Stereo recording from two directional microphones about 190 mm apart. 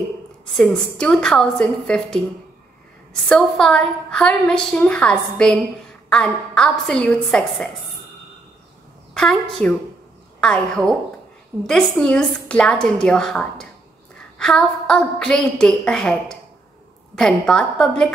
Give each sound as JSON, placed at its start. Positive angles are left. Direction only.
{"t": 0.5, "sound": "a woman's voice", "side_deg": 0}
{"t": 9.1, "sound": "a woman's voice", "side_deg": 5}